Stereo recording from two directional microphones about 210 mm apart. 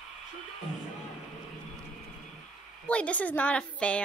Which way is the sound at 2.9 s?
5° left (ahead or behind).